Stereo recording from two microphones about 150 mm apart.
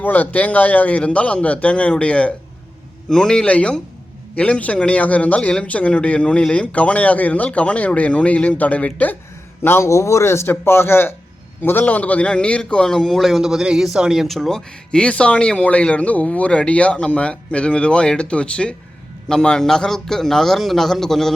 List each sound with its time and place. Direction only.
0.0 s a man's voice: 10° left (ahead or behind)